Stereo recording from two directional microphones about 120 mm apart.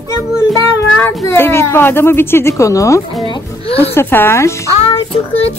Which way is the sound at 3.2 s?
45° left (ahead or behind).